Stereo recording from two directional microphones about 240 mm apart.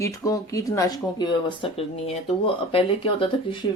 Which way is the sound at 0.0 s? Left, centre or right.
Centre.